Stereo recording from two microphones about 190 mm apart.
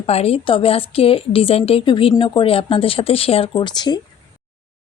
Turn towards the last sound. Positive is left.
turn(degrees=25)  # may be behind; listen again after turning